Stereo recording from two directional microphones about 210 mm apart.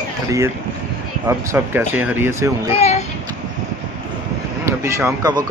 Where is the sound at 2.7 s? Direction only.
30° left (ahead or behind).